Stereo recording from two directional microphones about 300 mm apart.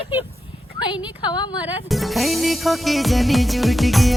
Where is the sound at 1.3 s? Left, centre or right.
Centre.